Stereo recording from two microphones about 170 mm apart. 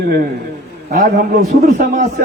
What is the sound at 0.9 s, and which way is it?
Speech, 65° right (ahead or behind).